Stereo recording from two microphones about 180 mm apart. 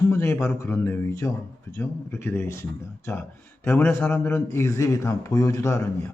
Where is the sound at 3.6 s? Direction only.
15° left (ahead or behind).